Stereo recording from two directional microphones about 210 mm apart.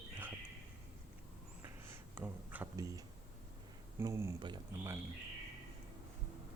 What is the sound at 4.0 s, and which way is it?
Speech, 15° right (ahead or behind).